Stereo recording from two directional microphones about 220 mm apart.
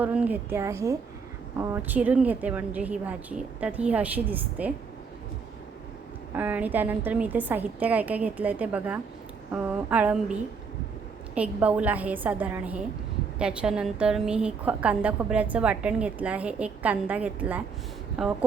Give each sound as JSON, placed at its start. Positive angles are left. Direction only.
{"t": 0.0, "sound": "a woman's voice", "side_deg": -5}
{"t": 6.3, "sound": "a woman's voice", "side_deg": -5}
{"t": 11.3, "sound": "a woman's voice", "side_deg": -5}